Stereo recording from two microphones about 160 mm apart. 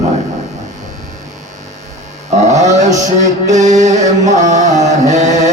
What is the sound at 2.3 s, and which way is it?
Speech, 45° right (ahead or behind).